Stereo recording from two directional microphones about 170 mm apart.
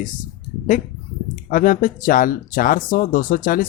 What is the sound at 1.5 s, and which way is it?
Speech, 55° left (ahead or behind).